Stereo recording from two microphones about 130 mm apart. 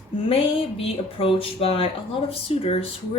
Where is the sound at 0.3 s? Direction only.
45° left (ahead or behind).